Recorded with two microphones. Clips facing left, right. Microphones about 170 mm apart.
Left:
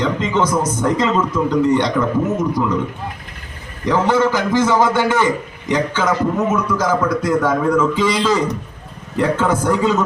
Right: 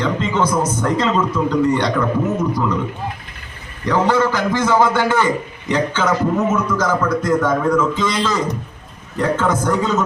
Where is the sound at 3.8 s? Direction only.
20° left (ahead or behind).